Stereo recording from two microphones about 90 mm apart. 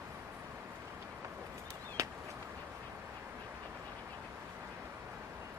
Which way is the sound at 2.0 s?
35° right (ahead or behind).